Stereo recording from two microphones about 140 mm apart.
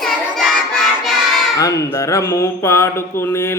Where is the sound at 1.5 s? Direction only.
25° left (ahead or behind).